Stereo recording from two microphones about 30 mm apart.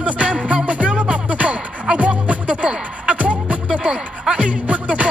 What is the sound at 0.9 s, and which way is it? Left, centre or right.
Music, right.